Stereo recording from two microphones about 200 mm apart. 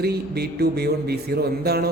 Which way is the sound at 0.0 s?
55° right (ahead or behind).